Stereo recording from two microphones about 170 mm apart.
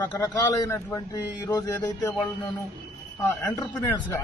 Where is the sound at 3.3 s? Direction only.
20° left (ahead or behind).